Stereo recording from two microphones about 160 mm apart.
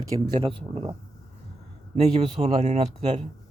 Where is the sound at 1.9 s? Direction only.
45° right (ahead or behind).